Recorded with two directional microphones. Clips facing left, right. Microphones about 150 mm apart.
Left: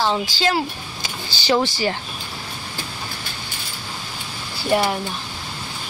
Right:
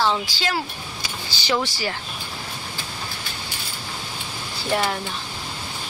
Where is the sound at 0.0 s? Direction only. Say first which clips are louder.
Left 2 dB; 30° left (ahead or behind).